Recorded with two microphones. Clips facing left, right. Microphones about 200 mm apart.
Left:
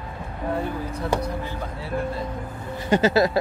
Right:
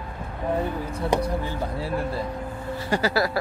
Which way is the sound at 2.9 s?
20° left (ahead or behind).